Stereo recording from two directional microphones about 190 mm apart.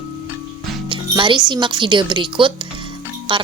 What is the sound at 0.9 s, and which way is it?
Speech, 25° right (ahead or behind).